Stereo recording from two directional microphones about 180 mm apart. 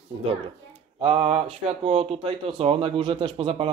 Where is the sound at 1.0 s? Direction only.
35° right (ahead or behind).